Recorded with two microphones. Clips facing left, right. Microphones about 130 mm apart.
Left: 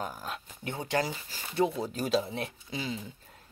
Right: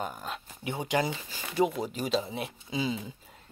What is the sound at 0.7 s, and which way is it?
Speech, 15° right (ahead or behind).